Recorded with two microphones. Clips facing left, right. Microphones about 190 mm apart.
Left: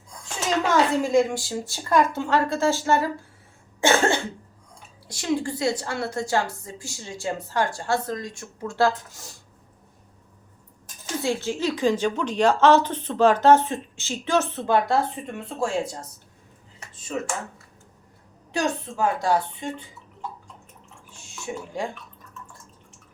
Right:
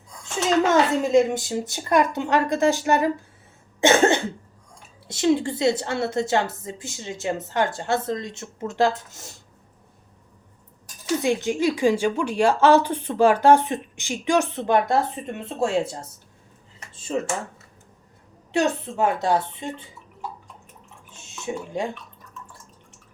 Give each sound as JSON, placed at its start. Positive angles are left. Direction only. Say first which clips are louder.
{"t": 0.6, "sound": "a woman's voice", "louder": "even", "side_deg": -20}
{"t": 3.8, "sound": "cough", "louder": "right 3 dB", "side_deg": -20}
{"t": 5.0, "sound": "a woman's voice", "louder": "right 5 dB", "side_deg": -25}
{"t": 11.2, "sound": "a woman's voice", "louder": "right 2 dB", "side_deg": -15}
{"t": 18.5, "sound": "a woman's voice", "louder": "right 3 dB", "side_deg": -25}
{"t": 21.1, "sound": "a sound", "louder": "right 3 dB", "side_deg": -20}